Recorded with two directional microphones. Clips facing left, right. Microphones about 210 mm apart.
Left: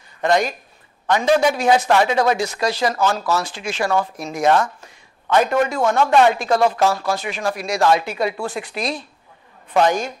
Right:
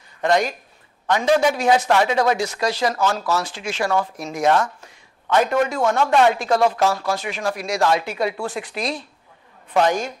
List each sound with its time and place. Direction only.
0.2 s speech: 10° left (ahead or behind)
4.5 s speech: 30° left (ahead or behind)
5.3 s speech: 15° left (ahead or behind)
6.3 s speech: 10° left (ahead or behind)